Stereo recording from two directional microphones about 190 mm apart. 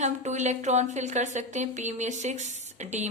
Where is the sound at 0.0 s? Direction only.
40° right (ahead or behind).